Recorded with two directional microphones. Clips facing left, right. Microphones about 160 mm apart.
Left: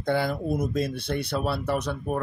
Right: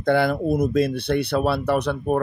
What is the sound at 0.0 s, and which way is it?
Speech, 70° right (ahead or behind).